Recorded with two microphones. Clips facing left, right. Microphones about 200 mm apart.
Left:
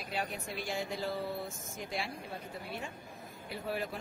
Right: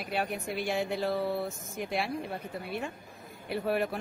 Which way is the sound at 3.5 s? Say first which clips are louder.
Right 8 dB; 65° right (ahead or behind).